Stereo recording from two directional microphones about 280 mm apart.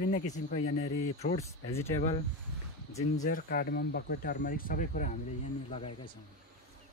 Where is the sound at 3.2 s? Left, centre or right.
Left.